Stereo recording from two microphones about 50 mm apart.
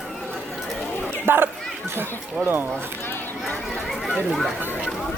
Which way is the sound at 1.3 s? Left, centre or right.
Right.